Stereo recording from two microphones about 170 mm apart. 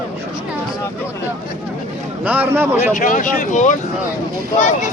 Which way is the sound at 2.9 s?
50° left (ahead or behind).